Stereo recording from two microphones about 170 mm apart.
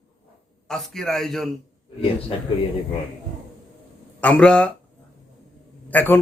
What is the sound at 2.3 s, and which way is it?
Speech, 35° left (ahead or behind).